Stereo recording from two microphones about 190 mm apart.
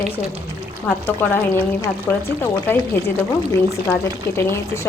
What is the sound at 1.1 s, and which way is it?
Speech, 10° left (ahead or behind).